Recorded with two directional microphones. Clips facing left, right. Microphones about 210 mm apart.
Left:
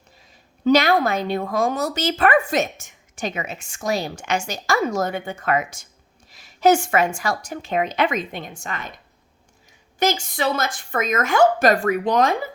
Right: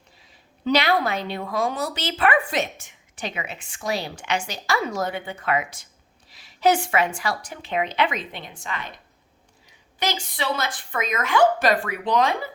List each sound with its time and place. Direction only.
0.2 s a woman's voice: 45° left (ahead or behind)